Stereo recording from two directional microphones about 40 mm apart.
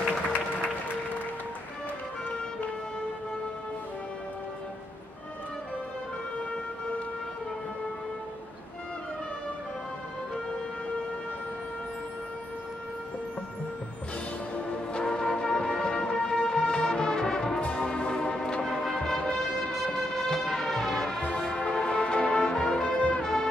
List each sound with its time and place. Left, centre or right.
15.0 s music: left
18.6 s music: centre
18.9 s music: centre
21.2 s music: left
23.2 s music: centre